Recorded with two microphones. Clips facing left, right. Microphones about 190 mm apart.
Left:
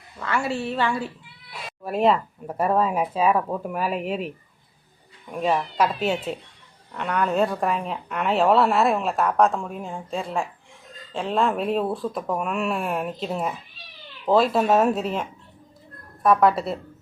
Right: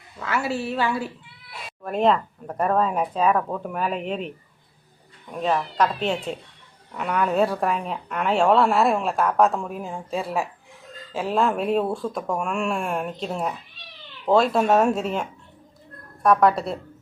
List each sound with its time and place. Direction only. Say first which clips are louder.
0.2 s a woman's voice: even; 5° right (ahead or behind)
1.8 s speech: even; 5° left (ahead or behind)
5.3 s a woman's voice: left 1 dB; 5° left (ahead or behind)